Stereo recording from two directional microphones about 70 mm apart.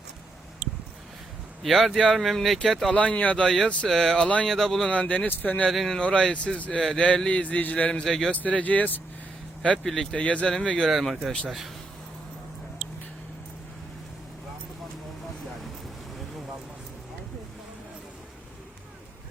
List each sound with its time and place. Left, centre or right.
1.6 s speech: centre
2.9 s speech: centre
3.4 s a man's voice: centre
4.9 s speech: centre
5.6 s speech: centre
6.0 s a man's voice: centre
9.7 s speech: centre
10.2 s a man's voice: centre
10.8 s speech: centre